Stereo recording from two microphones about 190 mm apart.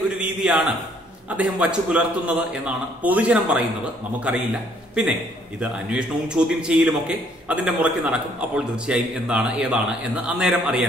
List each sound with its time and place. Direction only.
0.2 s a man's voice: 5° right (ahead or behind)
5.6 s a man's voice: 5° right (ahead or behind)